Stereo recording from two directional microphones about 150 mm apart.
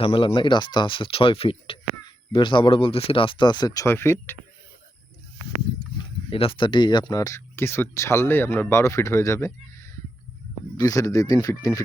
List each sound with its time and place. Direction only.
0.0 s speech: 40° left (ahead or behind); by 4.4 s 15° left (ahead or behind)
6.3 s speech: 35° left (ahead or behind); by 9.5 s 20° left (ahead or behind)
10.8 s speech: 20° left (ahead or behind)